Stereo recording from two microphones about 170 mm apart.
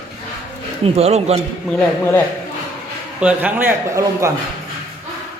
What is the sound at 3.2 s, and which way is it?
A man's voice, 10° right (ahead or behind).